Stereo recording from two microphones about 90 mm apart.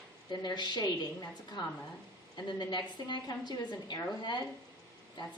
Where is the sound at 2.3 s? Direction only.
55° left (ahead or behind).